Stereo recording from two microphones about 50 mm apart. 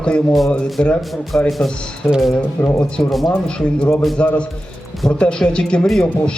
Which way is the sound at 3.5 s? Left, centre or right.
Left.